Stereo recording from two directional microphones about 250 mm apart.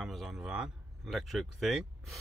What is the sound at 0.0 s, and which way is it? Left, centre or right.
Speech, centre.